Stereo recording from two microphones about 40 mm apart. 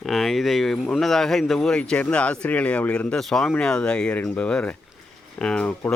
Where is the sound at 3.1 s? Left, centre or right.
Centre.